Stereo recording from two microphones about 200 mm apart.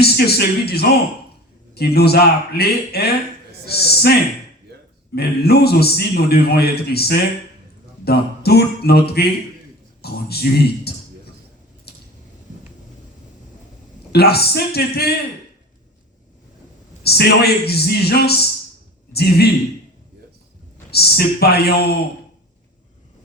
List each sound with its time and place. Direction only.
0.0 s a man's voice: 55° left (ahead or behind)
11.9 s a sound: 55° left (ahead or behind)
14.1 s a man's voice: 55° left (ahead or behind)
17.0 s a man's voice: 55° left (ahead or behind)
20.9 s a man's voice: 50° left (ahead or behind)